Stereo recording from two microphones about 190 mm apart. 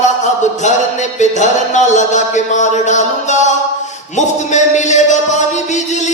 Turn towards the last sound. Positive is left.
turn(degrees=40)  # may be behind; listen again after turning